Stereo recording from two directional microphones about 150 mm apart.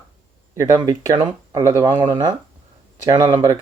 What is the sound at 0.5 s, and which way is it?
Speech, 25° right (ahead or behind).